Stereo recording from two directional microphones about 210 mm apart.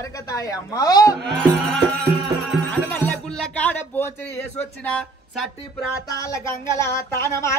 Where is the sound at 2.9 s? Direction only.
5° left (ahead or behind).